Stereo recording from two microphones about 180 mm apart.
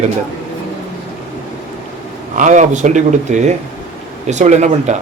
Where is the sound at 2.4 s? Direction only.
45° right (ahead or behind).